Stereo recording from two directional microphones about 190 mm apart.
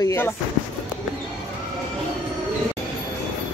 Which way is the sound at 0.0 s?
15° left (ahead or behind).